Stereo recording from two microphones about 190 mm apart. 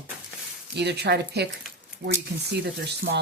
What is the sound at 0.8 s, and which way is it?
Speech, 60° right (ahead or behind).